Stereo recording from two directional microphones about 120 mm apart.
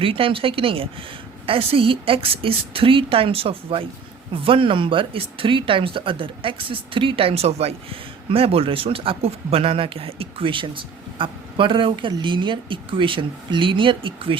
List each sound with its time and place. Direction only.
0.0 s speech: 50° right (ahead or behind)